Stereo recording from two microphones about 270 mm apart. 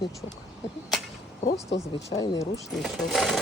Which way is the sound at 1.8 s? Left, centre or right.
Centre.